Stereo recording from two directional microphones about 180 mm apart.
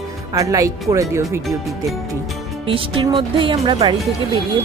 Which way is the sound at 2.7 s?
30° right (ahead or behind).